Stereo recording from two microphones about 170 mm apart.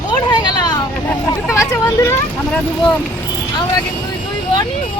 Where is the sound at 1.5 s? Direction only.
15° left (ahead or behind).